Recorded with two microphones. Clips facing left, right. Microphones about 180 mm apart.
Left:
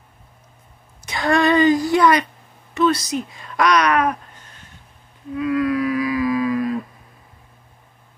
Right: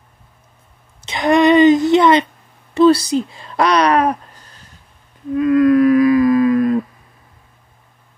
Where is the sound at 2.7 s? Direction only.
30° right (ahead or behind).